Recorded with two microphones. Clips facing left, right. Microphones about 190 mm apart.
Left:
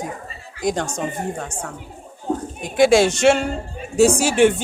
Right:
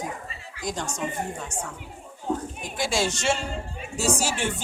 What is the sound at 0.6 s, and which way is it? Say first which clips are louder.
Speech: left 9 dB; 65° left (ahead or behind).